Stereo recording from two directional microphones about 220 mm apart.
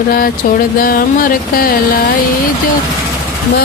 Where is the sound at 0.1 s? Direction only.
40° left (ahead or behind).